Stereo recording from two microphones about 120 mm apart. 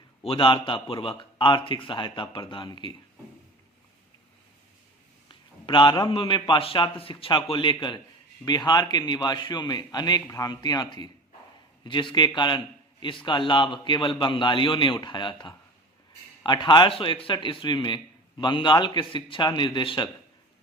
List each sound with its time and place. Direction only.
0.2 s a man's voice: 50° left (ahead or behind)
5.3 s a man's voice: 40° left (ahead or behind)